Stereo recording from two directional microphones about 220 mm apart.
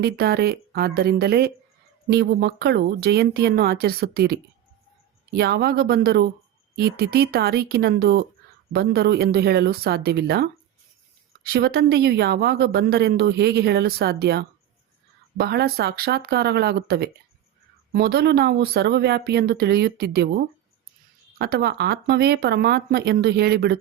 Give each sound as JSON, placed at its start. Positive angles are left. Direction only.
{"t": 0.0, "sound": "a woman's voice", "side_deg": -45}
{"t": 21.3, "sound": "a woman's voice", "side_deg": -45}